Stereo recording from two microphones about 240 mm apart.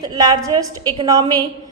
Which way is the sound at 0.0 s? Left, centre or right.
Centre.